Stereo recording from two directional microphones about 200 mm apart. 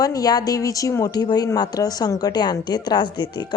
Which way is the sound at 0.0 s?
20° left (ahead or behind).